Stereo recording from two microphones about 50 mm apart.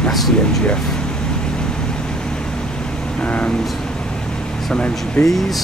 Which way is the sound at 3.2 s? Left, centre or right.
Left.